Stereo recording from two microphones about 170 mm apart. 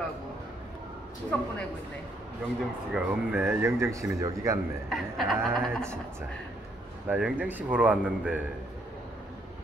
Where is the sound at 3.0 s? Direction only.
10° right (ahead or behind).